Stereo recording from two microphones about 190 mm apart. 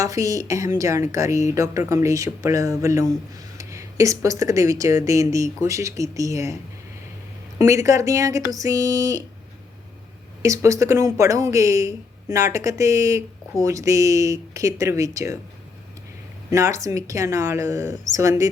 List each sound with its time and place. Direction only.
0.0 s speech: 15° right (ahead or behind)
7.6 s speech: 15° right (ahead or behind)
10.4 s speech: 15° right (ahead or behind)
16.5 s speech: 15° right (ahead or behind)